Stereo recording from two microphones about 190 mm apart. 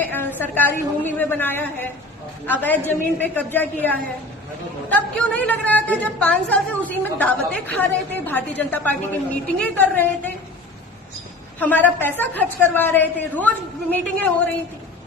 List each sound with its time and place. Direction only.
0.0 s a woman's voice: 10° left (ahead or behind)
5.1 s a woman's voice: 5° left (ahead or behind)
11.6 s a woman's voice: 10° left (ahead or behind)